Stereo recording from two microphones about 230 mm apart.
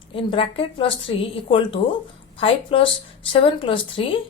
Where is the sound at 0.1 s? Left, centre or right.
Left.